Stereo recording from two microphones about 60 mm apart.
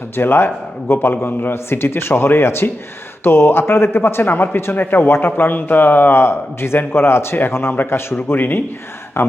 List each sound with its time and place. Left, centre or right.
0.2 s speech: left